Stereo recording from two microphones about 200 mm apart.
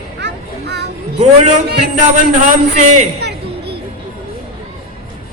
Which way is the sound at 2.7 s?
35° right (ahead or behind).